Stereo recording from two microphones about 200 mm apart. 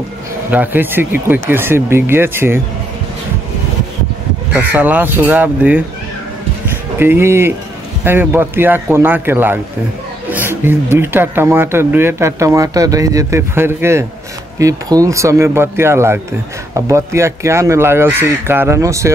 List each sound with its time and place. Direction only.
0.5 s speech: 10° right (ahead or behind)
4.6 s speech: 10° right (ahead or behind)
7.0 s speech: 10° right (ahead or behind)